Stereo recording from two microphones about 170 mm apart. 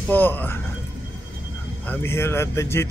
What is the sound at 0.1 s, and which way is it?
Speech, 10° left (ahead or behind).